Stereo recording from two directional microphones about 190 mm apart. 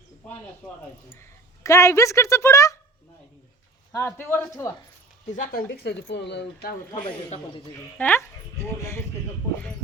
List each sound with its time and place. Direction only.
1.2 s a woman's voice: 15° left (ahead or behind)
3.9 s a man's voice: 10° left (ahead or behind)
5.3 s speech: 45° left (ahead or behind)
7.9 s speech: 10° left (ahead or behind)